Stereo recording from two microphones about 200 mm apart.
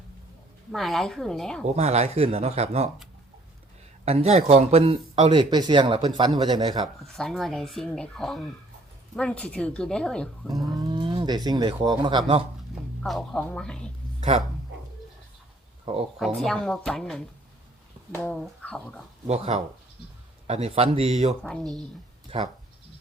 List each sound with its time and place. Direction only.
0.7 s speech: centre (ahead or behind)
1.6 s speech: 35° right (ahead or behind)
4.0 s speech: 30° right (ahead or behind)
6.8 s speech: centre (ahead or behind)
10.8 s speech: 20° right (ahead or behind)
13.0 s speech: centre (ahead or behind)
14.2 s speech: 30° right (ahead or behind)
16.1 s speech: centre (ahead or behind)
19.3 s speech: 30° right (ahead or behind)
21.4 s speech: centre (ahead or behind)
22.3 s speech: 30° right (ahead or behind)